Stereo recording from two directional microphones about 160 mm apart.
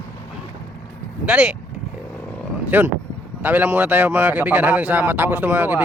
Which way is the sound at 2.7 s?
10° right (ahead or behind).